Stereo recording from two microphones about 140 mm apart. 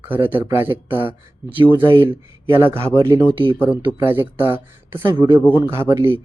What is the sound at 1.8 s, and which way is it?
Speech, 40° right (ahead or behind).